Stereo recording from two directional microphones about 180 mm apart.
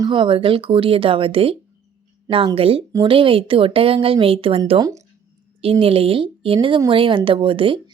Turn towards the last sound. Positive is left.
turn(degrees=-30)  # may be behind; listen again after turning